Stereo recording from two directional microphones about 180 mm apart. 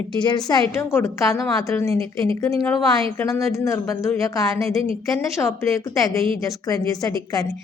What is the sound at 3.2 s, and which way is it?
A woman's voice, 15° left (ahead or behind).